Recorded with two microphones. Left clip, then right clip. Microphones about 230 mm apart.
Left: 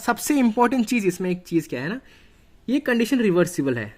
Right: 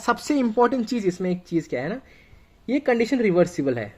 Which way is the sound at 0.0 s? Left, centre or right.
Left.